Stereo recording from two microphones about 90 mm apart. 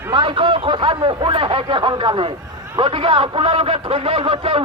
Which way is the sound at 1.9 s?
55° right (ahead or behind).